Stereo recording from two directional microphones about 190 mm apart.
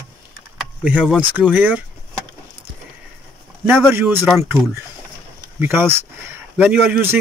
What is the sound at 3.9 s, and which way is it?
Speech, 10° right (ahead or behind).